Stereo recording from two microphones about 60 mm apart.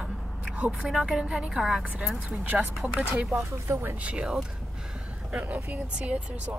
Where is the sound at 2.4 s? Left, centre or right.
Right.